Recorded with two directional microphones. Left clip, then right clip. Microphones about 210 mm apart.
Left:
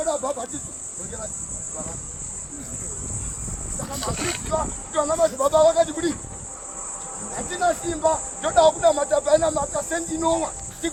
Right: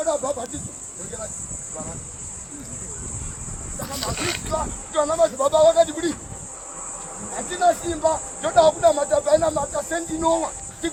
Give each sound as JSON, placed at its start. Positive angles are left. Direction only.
{"t": 0.0, "sound": "speech", "side_deg": 0}
{"t": 4.0, "sound": "speech", "side_deg": -30}
{"t": 4.5, "sound": "speech", "side_deg": 0}
{"t": 7.3, "sound": "speech", "side_deg": 0}